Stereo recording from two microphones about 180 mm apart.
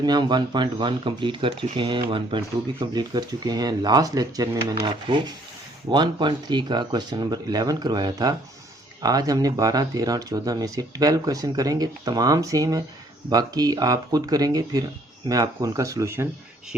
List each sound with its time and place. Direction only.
0.0 s speech: 25° right (ahead or behind)